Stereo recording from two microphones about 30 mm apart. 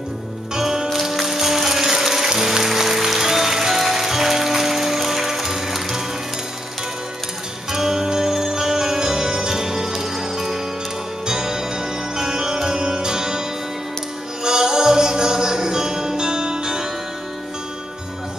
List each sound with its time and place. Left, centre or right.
0.6 s music: centre
7.7 s music: centre
14.4 s music: right